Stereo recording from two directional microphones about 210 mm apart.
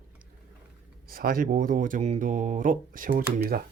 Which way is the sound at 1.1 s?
45° right (ahead or behind).